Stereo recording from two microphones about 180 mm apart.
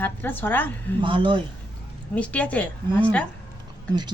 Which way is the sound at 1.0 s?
25° right (ahead or behind).